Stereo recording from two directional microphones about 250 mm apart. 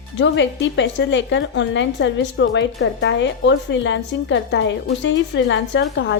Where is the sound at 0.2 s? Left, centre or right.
Left.